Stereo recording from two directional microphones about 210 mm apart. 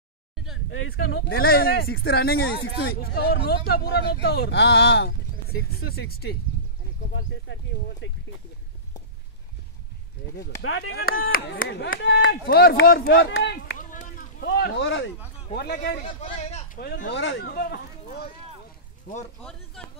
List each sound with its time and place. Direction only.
0.7 s speech: 60° left (ahead or behind)
8.0 s speech: 60° left (ahead or behind)
10.6 s speech: 65° left (ahead or behind)
12.4 s speech: 45° left (ahead or behind)
13.0 s speech: 65° left (ahead or behind)
13.7 s a sound: 40° left (ahead or behind); by 15.0 s 60° left (ahead or behind)
15.5 s speech: 50° left (ahead or behind)
16.0 s speech: 25° left (ahead or behind)
17.1 s speech: 60° left (ahead or behind); by 19.2 s 40° left (ahead or behind)